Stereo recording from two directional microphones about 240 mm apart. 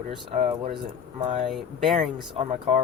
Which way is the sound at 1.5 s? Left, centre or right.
Centre.